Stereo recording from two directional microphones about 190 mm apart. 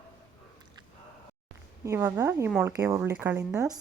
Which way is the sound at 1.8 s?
15° right (ahead or behind).